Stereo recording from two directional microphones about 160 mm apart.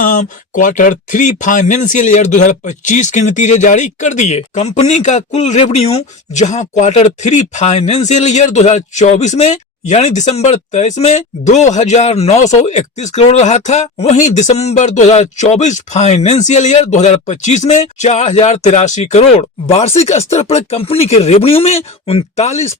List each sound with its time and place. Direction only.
0.0 s speech: 55° left (ahead or behind)